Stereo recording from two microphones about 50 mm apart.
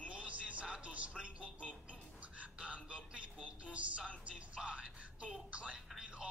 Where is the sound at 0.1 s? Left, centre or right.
Right.